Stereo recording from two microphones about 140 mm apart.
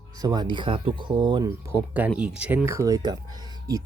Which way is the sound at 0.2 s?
30° right (ahead or behind).